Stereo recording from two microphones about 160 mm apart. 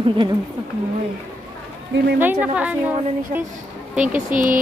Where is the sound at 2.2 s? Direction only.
10° right (ahead or behind).